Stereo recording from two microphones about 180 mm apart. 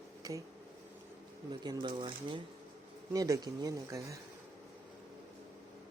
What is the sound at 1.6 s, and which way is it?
Speech, 25° right (ahead or behind).